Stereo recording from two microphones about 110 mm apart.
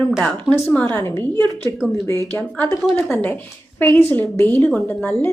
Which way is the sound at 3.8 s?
15° left (ahead or behind).